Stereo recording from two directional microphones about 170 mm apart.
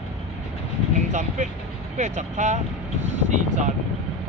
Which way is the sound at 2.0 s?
45° right (ahead or behind).